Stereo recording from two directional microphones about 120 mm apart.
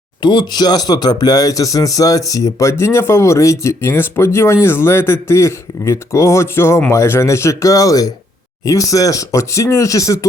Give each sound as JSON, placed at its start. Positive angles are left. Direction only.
{"t": 0.2, "sound": "speech", "side_deg": 40}